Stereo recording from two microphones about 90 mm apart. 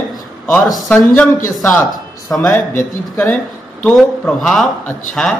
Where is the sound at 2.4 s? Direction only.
20° left (ahead or behind).